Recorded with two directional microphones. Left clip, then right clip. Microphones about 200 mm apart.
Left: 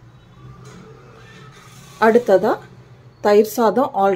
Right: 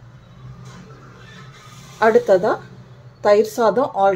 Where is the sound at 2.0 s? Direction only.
10° left (ahead or behind).